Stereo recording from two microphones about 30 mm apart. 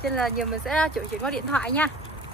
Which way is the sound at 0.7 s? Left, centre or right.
Left.